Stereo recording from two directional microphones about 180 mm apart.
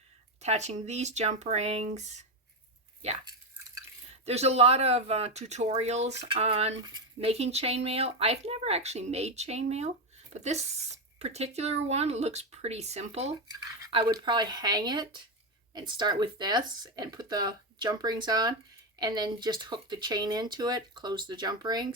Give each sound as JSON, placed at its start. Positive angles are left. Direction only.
{"t": 0.4, "sound": "speech", "side_deg": -40}
{"t": 4.3, "sound": "speech", "side_deg": -35}
{"t": 13.9, "sound": "speech", "side_deg": -25}